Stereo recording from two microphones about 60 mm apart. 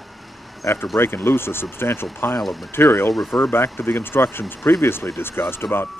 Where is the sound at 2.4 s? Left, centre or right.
Centre.